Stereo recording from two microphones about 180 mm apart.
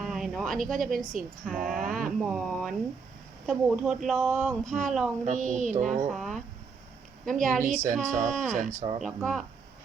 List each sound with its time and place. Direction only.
0.0 s a sound: centre (ahead or behind)
0.6 s speech: 50° right (ahead or behind)
2.0 s speech: centre (ahead or behind)
4.6 s speech: 45° right (ahead or behind)
4.9 s speech: centre (ahead or behind)
5.2 s speech: 40° right (ahead or behind)
6.1 s speech: centre (ahead or behind)
7.6 s speech: 45° right (ahead or behind)
8.3 s speech: centre (ahead or behind)
8.5 s speech: 35° right (ahead or behind)
9.0 s speech: centre (ahead or behind)